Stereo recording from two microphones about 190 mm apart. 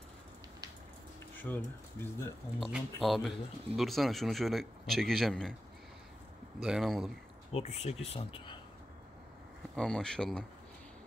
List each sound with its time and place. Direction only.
1.4 s speech: 10° left (ahead or behind)
2.6 s speech: centre (ahead or behind)
6.6 s speech: centre (ahead or behind)
7.5 s speech: 35° left (ahead or behind)
9.8 s speech: 5° left (ahead or behind)